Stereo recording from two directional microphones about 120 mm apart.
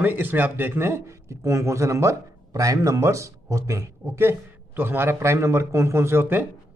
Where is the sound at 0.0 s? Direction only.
15° right (ahead or behind).